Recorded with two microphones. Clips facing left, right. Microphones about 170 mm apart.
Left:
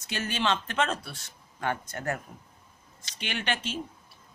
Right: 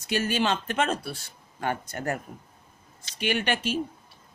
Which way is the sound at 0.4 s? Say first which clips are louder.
Right 2 dB; 45° right (ahead or behind).